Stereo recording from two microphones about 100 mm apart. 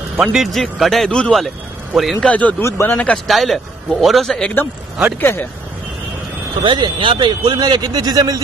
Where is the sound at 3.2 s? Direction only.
Centre (ahead or behind).